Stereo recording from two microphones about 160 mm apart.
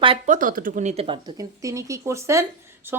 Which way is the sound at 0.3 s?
55° right (ahead or behind).